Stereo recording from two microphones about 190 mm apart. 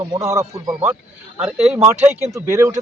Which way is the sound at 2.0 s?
15° right (ahead or behind).